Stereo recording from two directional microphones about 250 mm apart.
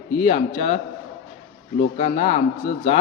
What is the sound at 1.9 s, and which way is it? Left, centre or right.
Speech, left.